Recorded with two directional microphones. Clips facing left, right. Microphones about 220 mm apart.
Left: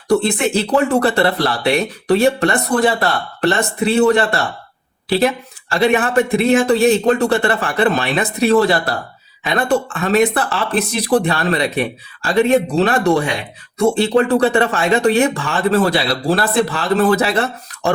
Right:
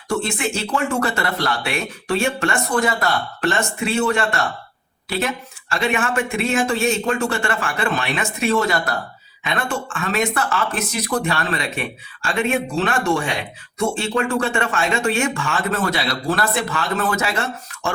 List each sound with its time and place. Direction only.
0.1 s speech: 35° left (ahead or behind)